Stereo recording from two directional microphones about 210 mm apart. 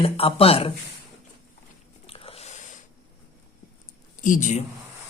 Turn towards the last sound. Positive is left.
turn(degrees=40)  # may be behind; listen again after turning